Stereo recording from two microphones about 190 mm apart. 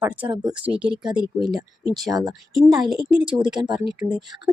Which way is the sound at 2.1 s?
20° right (ahead or behind).